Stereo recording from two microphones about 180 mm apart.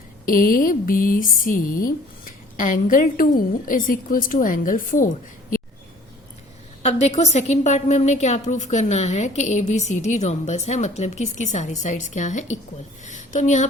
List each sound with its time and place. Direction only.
0.3 s speech: 50° left (ahead or behind)
6.8 s a woman's voice: 40° left (ahead or behind)